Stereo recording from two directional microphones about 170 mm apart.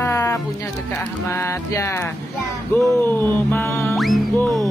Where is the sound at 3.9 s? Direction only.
Centre (ahead or behind).